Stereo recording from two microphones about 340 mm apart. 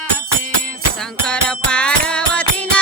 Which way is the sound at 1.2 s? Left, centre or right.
Centre.